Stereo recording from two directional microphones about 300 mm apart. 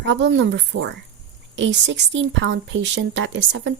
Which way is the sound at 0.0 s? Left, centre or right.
Right.